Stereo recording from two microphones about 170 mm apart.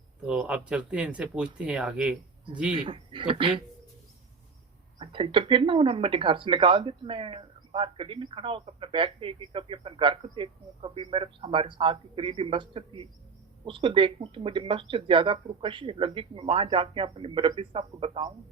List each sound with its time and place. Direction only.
0.3 s speech: 5° right (ahead or behind)
2.7 s speech: 30° right (ahead or behind)
4.9 s speech: 30° right (ahead or behind)